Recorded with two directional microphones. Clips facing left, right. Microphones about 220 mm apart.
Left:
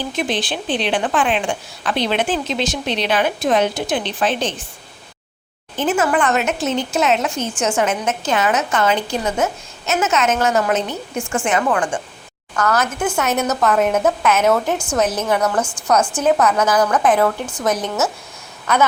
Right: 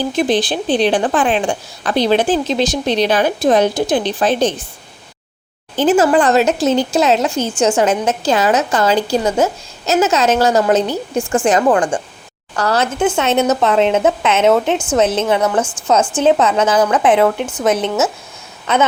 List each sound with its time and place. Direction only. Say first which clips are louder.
0.0 s a woman's voice: right 7 dB; 35° right (ahead or behind)
5.8 s a woman's voice: right 6 dB; 35° right (ahead or behind)
15.4 s a woman's voice: right 3 dB; 5° right (ahead or behind)
15.9 s speech: right 3 dB; 25° right (ahead or behind)